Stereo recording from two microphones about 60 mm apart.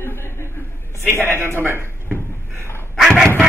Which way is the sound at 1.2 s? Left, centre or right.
Right.